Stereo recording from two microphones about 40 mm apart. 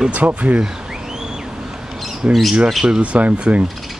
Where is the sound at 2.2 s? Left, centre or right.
Right.